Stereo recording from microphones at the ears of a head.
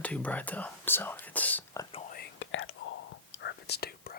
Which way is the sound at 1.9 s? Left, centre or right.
Left.